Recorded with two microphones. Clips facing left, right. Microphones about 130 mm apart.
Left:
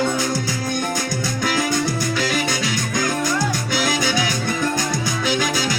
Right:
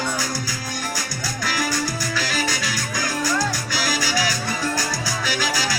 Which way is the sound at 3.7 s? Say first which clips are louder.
Left 4 dB; 25° left (ahead or behind).